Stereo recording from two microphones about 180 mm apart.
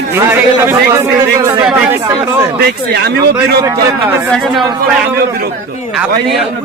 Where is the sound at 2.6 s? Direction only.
65° right (ahead or behind).